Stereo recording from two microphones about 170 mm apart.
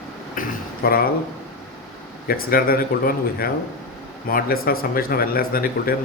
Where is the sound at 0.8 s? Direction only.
60° left (ahead or behind).